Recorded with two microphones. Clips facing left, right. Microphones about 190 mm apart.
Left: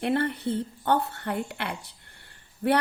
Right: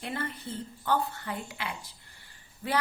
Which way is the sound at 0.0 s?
65° left (ahead or behind).